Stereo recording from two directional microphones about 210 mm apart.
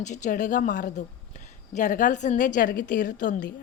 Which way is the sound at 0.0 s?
35° left (ahead or behind).